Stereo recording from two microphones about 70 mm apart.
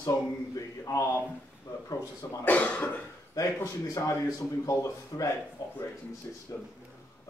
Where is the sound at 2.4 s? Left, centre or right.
Left.